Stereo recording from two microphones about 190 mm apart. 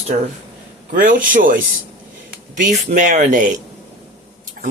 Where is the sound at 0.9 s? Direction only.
45° right (ahead or behind).